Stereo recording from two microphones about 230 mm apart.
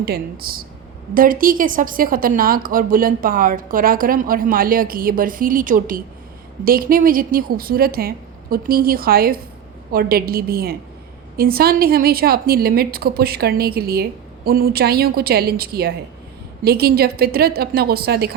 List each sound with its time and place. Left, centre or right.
0.0 s a woman's voice: right